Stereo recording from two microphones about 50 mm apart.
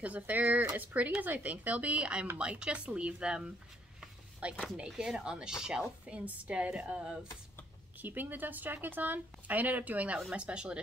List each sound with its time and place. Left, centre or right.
0.0 s a woman's voice: right
4.7 s speech: centre
6.0 s a woman's voice: right
8.0 s a woman's voice: right